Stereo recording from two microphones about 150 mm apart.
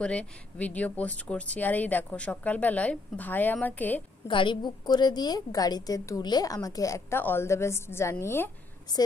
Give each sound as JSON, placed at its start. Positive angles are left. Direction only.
{"t": 0.0, "sound": "speech", "side_deg": 5}
{"t": 4.3, "sound": "a woman's voice", "side_deg": 35}